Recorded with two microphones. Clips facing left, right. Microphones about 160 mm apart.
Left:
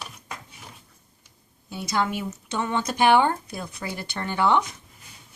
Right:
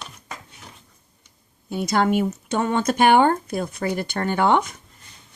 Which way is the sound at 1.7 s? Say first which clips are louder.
Right 6 dB; 55° right (ahead or behind).